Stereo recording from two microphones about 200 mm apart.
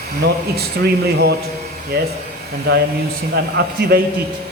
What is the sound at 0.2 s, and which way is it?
Speech, 55° right (ahead or behind).